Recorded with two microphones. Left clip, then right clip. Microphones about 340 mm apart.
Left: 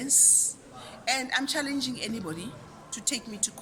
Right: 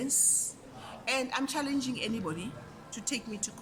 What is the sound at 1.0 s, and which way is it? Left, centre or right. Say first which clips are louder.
Speech: left 4 dB; centre.